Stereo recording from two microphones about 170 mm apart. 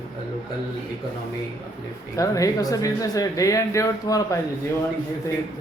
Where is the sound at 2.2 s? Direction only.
20° left (ahead or behind).